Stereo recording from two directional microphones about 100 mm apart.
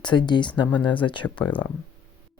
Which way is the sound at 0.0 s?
50° left (ahead or behind).